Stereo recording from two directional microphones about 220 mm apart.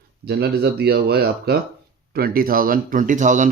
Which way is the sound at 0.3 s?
50° right (ahead or behind).